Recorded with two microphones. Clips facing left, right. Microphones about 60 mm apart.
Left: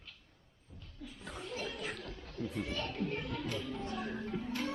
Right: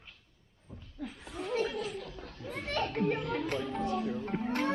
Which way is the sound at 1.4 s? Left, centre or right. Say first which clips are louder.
Right 11 dB; right.